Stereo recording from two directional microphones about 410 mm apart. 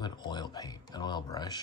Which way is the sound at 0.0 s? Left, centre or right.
Centre.